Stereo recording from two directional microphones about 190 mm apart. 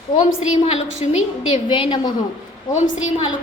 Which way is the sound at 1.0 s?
30° left (ahead or behind).